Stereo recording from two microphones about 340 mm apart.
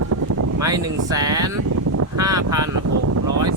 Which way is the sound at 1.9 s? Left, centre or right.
Right.